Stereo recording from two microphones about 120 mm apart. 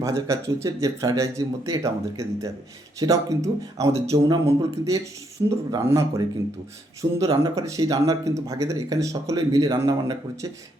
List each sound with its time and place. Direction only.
0.0 s speech: 25° right (ahead or behind)